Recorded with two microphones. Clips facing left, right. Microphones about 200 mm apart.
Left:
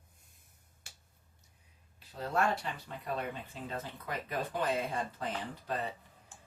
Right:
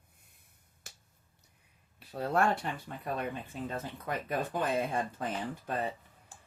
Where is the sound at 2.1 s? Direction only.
55° right (ahead or behind).